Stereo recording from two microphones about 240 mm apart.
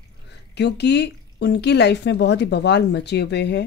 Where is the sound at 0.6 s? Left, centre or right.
Left.